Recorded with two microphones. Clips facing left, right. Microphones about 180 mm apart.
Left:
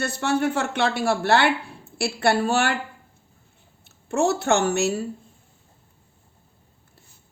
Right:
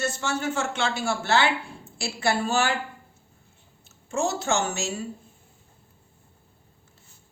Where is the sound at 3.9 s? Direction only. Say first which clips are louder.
Left 5 dB; 60° left (ahead or behind).